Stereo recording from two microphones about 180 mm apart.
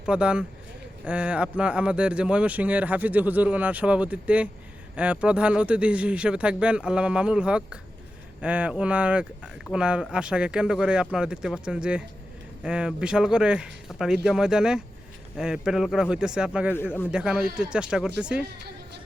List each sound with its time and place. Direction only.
0.0 s a man's voice: 5° right (ahead or behind)